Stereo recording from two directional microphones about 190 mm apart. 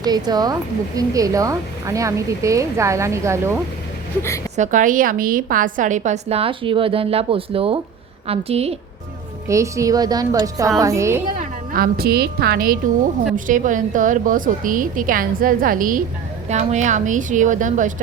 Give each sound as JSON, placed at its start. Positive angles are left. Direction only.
{"t": 0.0, "sound": "a woman's voice", "side_deg": -20}
{"t": 4.5, "sound": "a woman's voice", "side_deg": -40}
{"t": 9.5, "sound": "a woman's voice", "side_deg": -15}
{"t": 11.3, "sound": "a woman's voice", "side_deg": -50}